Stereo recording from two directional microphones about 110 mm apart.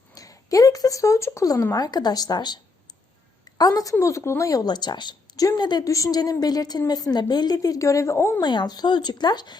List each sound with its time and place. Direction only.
0.1 s speech: 30° left (ahead or behind)
3.6 s a woman's voice: 35° left (ahead or behind)
8.4 s a woman's voice: 40° left (ahead or behind)